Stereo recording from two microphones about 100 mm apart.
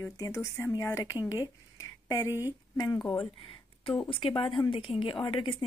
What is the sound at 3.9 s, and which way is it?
Speech, 65° left (ahead or behind).